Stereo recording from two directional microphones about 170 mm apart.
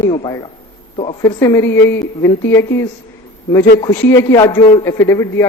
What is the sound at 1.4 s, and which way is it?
A man's voice, 15° left (ahead or behind).